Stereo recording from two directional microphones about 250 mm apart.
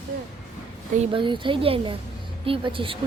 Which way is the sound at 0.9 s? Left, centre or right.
Right.